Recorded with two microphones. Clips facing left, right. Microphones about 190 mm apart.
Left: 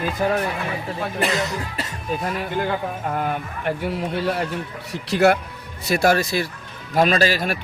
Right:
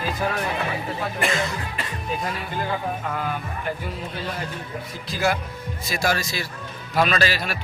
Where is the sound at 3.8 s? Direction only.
65° left (ahead or behind).